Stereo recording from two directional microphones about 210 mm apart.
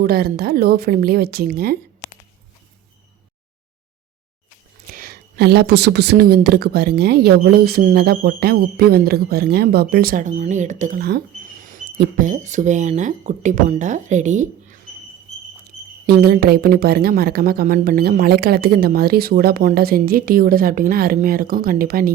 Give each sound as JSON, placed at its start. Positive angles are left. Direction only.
{"t": 0.0, "sound": "a woman's voice", "side_deg": -45}
{"t": 4.9, "sound": "a woman's voice", "side_deg": -45}
{"t": 16.0, "sound": "a woman's voice", "side_deg": -50}